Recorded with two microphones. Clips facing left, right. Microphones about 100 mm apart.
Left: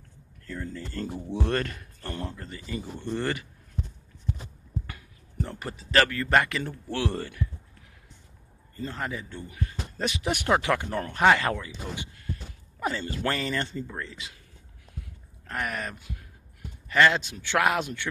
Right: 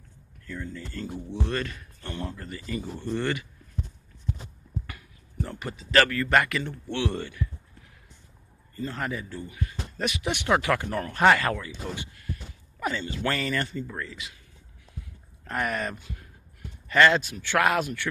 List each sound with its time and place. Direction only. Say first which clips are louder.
0.5 s speech: left 1 dB; 35° left (ahead or behind)
1.3 s a man's voice: left 3 dB; 50° left (ahead or behind); by 3.4 s 35° left (ahead or behind)
5.5 s a man's voice: right 1 dB; 35° left (ahead or behind)
6.6 s speech: even; 40° left (ahead or behind)
8.8 s a man's voice: right 2 dB; 20° left (ahead or behind); by 10.5 s 40° left (ahead or behind)
10.6 s a man's voice: even; 20° left (ahead or behind)
12.8 s speech: even; 35° left (ahead or behind)
13.3 s a man's voice: right 1 dB; 25° left (ahead or behind)
15.4 s speech: right 3 dB; centre (ahead or behind)
17.2 s a man's voice: right 1 dB; 20° left (ahead or behind)